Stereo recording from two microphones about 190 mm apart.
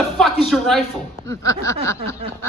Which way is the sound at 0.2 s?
Centre (ahead or behind).